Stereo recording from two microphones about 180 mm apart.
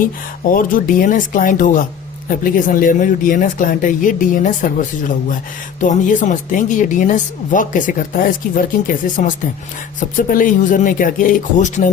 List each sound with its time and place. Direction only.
0.0 s speech: 50° left (ahead or behind)
10.2 s speech: 50° left (ahead or behind)